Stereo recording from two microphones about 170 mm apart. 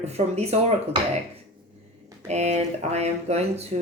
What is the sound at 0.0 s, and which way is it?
Speech, 40° right (ahead or behind).